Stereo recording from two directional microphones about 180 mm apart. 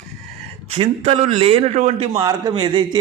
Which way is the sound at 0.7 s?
35° right (ahead or behind).